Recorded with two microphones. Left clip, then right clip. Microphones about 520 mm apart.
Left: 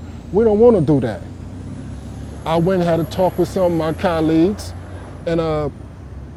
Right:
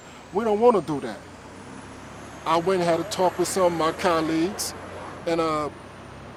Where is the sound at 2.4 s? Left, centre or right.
Left.